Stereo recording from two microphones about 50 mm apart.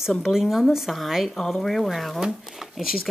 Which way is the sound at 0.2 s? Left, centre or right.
Centre.